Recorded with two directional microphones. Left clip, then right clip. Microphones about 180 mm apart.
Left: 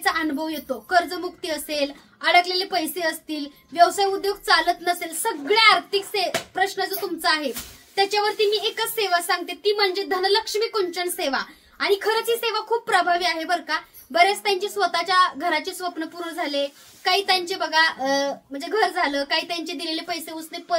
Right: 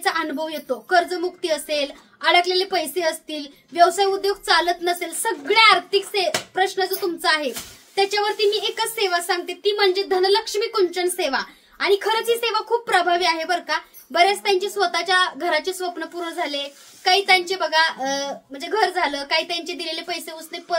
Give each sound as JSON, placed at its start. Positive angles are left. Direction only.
{"t": 0.0, "sound": "a woman's voice", "side_deg": -15}